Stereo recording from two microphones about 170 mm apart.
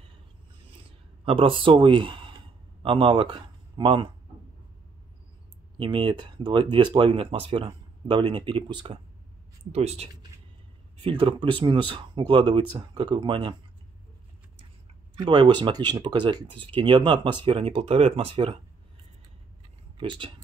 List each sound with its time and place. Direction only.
1.2 s speech: 30° right (ahead or behind)
5.8 s speech: 30° right (ahead or behind)
15.1 s speech: 25° right (ahead or behind)
20.0 s speech: 30° right (ahead or behind)